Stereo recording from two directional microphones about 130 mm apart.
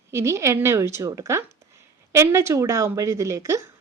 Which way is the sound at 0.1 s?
20° right (ahead or behind).